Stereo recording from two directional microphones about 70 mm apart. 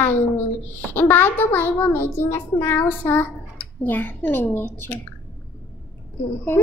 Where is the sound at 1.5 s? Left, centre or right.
Left.